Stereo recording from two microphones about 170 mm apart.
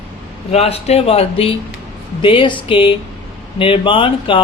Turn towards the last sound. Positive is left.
turn(degrees=30)  # may be behind; listen again after turning